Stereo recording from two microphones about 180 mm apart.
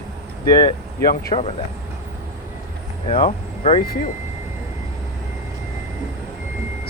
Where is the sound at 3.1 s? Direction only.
35° left (ahead or behind).